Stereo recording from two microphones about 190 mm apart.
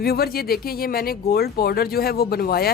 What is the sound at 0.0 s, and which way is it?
Speech, 55° left (ahead or behind).